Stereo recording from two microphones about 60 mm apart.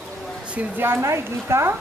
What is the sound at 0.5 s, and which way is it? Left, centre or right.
Speech, right.